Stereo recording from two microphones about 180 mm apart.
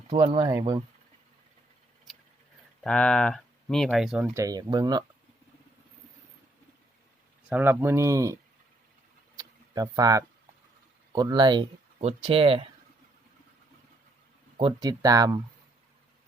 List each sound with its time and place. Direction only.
0.1 s speech: 25° right (ahead or behind)
2.8 s speech: 5° left (ahead or behind)
4.4 s speech: 20° right (ahead or behind)
7.5 s speech: 10° right (ahead or behind)
9.4 s a sound: 20° right (ahead or behind)
11.1 s speech: 25° right (ahead or behind)
14.6 s speech: 25° right (ahead or behind)